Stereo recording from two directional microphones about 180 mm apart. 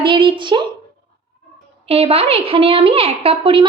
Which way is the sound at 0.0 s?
25° right (ahead or behind).